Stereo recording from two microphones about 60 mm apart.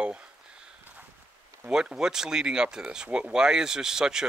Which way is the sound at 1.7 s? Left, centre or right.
Centre.